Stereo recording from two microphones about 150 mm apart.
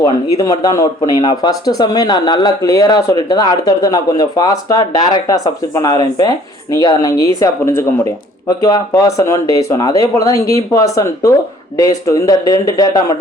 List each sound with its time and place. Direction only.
0.0 s speech: 25° left (ahead or behind)